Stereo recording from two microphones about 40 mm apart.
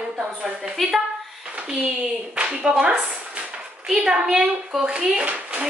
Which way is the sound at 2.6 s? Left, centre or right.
Right.